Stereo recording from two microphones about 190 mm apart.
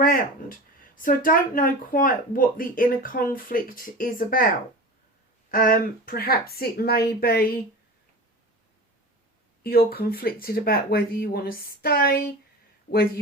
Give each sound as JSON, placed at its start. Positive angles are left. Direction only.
{"t": 0.0, "sound": "speech", "side_deg": 45}
{"t": 5.5, "sound": "speech", "side_deg": 45}
{"t": 9.6, "sound": "speech", "side_deg": 50}